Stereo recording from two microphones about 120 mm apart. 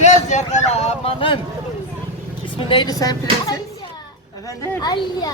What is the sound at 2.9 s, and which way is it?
Speech, 30° left (ahead or behind).